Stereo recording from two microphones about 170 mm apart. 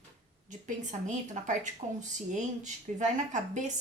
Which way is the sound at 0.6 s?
45° right (ahead or behind).